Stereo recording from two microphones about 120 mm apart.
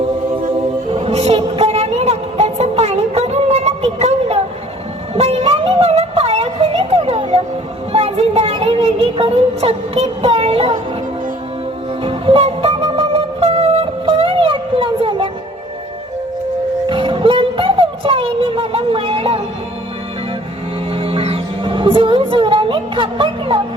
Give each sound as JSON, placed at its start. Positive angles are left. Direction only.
{"t": 0.9, "sound": "a sound", "side_deg": -55}
{"t": 7.9, "sound": "child singing", "side_deg": -55}
{"t": 12.0, "sound": "music", "side_deg": -50}
{"t": 16.9, "sound": "music", "side_deg": -45}
{"t": 20.9, "sound": "music", "side_deg": -50}